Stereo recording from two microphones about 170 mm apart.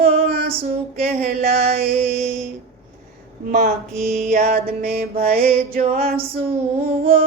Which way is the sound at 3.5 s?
55° right (ahead or behind).